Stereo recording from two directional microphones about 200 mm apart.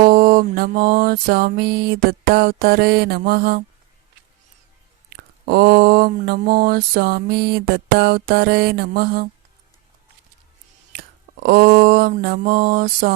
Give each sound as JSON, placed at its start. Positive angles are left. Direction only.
{"t": 0.0, "sound": "mantra", "side_deg": -45}
{"t": 5.1, "sound": "mantra", "side_deg": -50}
{"t": 10.9, "sound": "a sound", "side_deg": -50}